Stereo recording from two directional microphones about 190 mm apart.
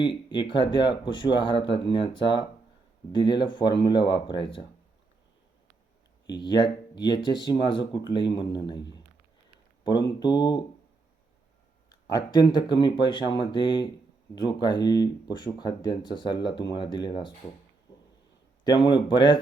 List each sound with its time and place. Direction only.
0.0 s speech: 25° left (ahead or behind)
6.2 s speech: 25° left (ahead or behind)
10.2 s speech: 20° left (ahead or behind)
12.0 s speech: 20° left (ahead or behind)
17.9 s a sound: 20° left (ahead or behind)
18.6 s speech: 25° left (ahead or behind)